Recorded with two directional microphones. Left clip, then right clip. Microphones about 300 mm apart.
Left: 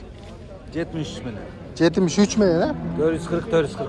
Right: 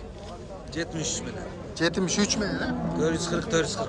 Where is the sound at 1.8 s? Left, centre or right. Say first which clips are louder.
Left 6 dB; centre.